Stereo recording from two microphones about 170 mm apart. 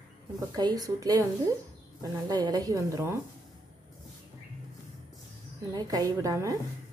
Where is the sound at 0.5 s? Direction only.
20° right (ahead or behind).